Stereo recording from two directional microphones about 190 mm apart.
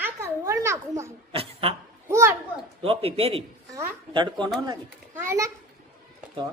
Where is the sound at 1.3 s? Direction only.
30° right (ahead or behind).